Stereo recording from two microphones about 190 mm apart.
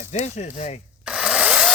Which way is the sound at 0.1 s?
35° left (ahead or behind).